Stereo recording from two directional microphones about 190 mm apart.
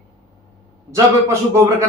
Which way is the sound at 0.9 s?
15° right (ahead or behind).